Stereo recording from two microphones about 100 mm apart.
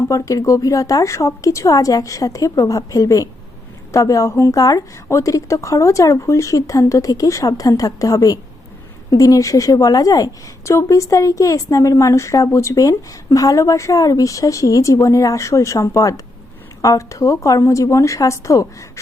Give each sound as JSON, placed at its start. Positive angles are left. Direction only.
{"t": 0.1, "sound": "a woman's voice", "side_deg": 35}